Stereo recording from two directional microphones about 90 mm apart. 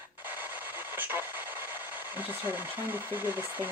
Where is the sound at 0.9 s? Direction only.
20° right (ahead or behind).